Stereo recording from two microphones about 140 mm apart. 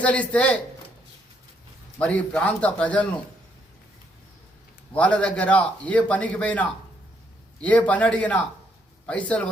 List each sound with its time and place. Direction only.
0.0 s a man's voice: 10° left (ahead or behind)
2.0 s a man's voice: 10° left (ahead or behind)
4.9 s a man's voice: 10° left (ahead or behind)